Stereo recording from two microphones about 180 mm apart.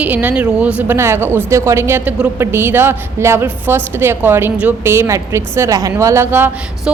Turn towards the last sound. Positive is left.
turn(degrees=-10)  # may be behind; listen again after turning